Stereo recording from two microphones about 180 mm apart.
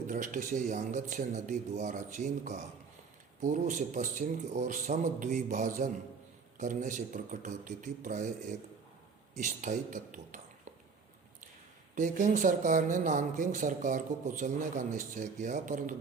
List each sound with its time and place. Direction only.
0.1 s speech: 45° right (ahead or behind)
9.3 s speech: 45° right (ahead or behind)
11.9 s speech: 45° right (ahead or behind)